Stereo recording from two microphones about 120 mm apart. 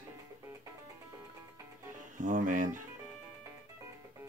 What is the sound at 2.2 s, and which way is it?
Speech, 90° right.